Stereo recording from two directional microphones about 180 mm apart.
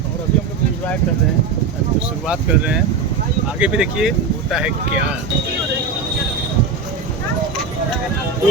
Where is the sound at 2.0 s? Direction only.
5° right (ahead or behind).